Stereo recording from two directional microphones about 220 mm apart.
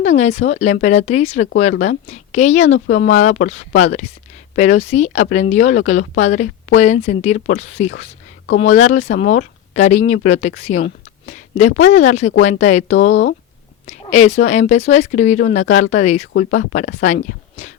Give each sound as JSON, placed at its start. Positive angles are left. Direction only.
{"t": 0.0, "sound": "speech", "side_deg": 30}
{"t": 2.6, "sound": "speech", "side_deg": 60}
{"t": 3.1, "sound": "speech", "side_deg": 35}